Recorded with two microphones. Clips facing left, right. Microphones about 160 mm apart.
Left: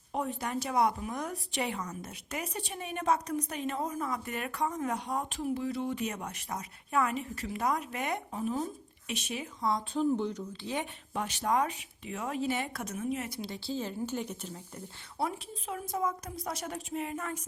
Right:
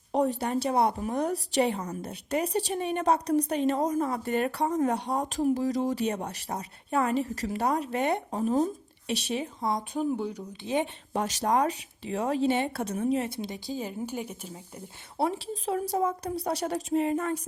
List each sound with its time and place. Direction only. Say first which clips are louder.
0.1 s a woman's voice: right 7 dB; 35° right (ahead or behind); by 10.4 s 10° right (ahead or behind)
10.6 s a woman's voice: right 8 dB; 20° right (ahead or behind)
11.1 s a woman's voice: right 3 dB; 40° right (ahead or behind); by 14.6 s 10° right (ahead or behind)
15.2 s a woman's voice: right 6 dB; 30° right (ahead or behind)